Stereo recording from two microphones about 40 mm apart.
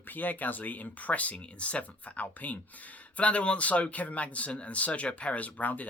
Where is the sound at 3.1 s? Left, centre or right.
Left.